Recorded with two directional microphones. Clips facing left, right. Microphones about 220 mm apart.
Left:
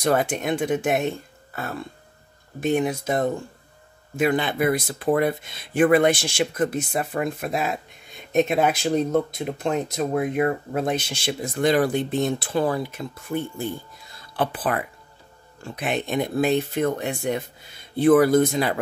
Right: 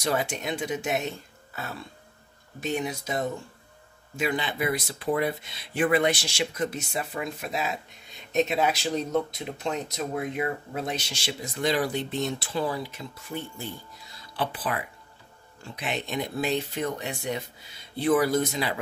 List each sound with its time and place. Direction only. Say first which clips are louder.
0.0 s speech: left 6 dB; 55° left (ahead or behind)